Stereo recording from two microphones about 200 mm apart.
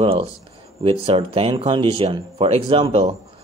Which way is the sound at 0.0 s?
30° right (ahead or behind).